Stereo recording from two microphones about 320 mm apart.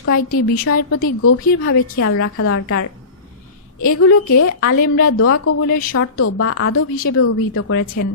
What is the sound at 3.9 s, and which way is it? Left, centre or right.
Speech, left.